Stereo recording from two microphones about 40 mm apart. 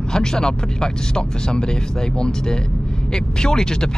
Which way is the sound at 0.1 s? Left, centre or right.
Centre.